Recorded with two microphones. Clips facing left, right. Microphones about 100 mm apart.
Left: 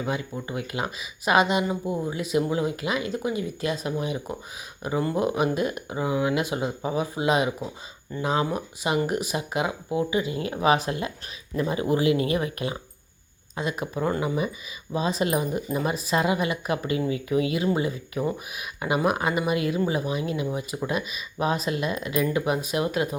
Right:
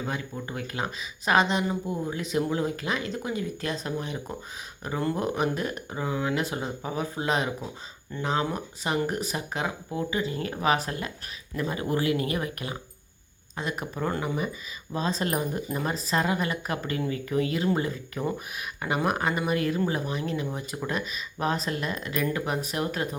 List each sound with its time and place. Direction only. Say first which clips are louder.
0.0 s speech: left 3 dB; 10° left (ahead or behind)